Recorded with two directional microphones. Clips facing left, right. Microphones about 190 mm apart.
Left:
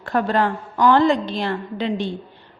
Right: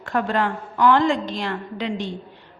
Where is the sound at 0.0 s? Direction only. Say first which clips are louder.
Left 3 dB; 35° left (ahead or behind).